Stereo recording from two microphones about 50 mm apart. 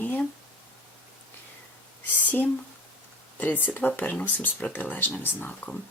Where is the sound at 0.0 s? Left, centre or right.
Left.